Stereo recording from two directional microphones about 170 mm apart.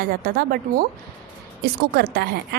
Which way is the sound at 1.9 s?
65° right (ahead or behind).